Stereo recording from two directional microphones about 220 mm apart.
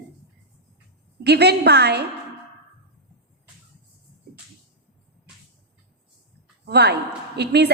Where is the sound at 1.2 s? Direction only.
50° right (ahead or behind).